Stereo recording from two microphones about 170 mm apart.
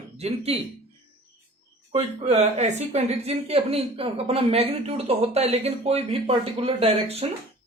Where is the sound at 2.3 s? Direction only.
40° right (ahead or behind).